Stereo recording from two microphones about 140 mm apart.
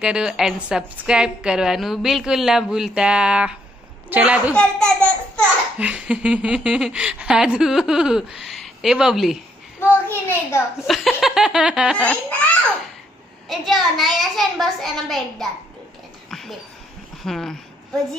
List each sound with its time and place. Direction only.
0.0 s a woman's voice: 5° right (ahead or behind)
4.6 s a child's voice: 5° left (ahead or behind)
5.8 s speech: 10° right (ahead or behind)
9.8 s a child's voice: 15° left (ahead or behind)
10.9 s laughter: centre (ahead or behind)
12.0 s speech: 10° left (ahead or behind)
16.3 s a sound: centre (ahead or behind)
17.2 s a woman's voice: 5° left (ahead or behind)